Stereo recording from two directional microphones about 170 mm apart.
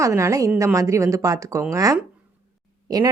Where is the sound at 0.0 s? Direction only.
15° right (ahead or behind).